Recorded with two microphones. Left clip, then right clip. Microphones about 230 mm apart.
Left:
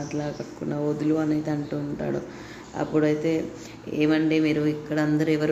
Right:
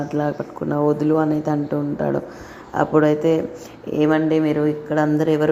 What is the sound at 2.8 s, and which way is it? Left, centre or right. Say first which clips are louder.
A woman's voice: right 7 dB; centre.